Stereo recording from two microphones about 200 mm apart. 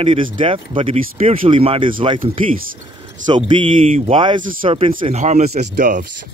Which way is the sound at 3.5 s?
25° right (ahead or behind).